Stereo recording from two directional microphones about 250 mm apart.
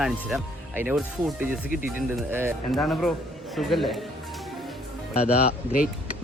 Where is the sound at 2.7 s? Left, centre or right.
Centre.